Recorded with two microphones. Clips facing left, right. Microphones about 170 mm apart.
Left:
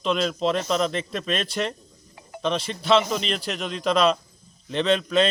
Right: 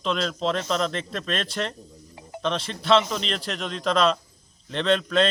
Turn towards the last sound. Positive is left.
turn(degrees=5)  # may be behind; listen again after turning